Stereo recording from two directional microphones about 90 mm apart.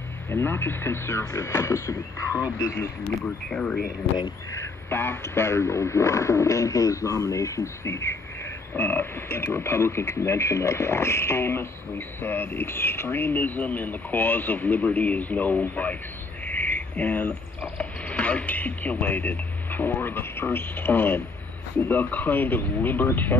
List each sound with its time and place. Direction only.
0.3 s speech: 30° left (ahead or behind)
3.4 s speech: 10° left (ahead or behind)
4.6 s speech: 25° left (ahead or behind)